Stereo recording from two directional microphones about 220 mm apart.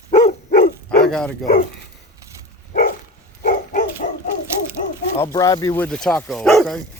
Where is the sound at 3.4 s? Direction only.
35° left (ahead or behind).